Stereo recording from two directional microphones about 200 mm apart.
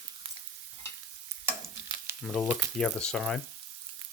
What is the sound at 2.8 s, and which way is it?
Speech, 5° left (ahead or behind).